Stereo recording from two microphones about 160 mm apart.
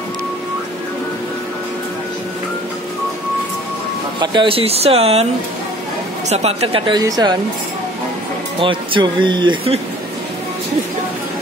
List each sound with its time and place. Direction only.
4.2 s speech: 30° right (ahead or behind)
7.0 s speech: 25° right (ahead or behind)
8.5 s speech: 30° right (ahead or behind)